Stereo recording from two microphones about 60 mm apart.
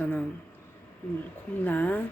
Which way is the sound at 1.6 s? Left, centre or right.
Left.